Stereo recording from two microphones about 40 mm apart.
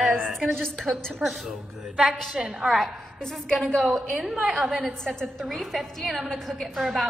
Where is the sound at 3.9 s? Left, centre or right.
Centre.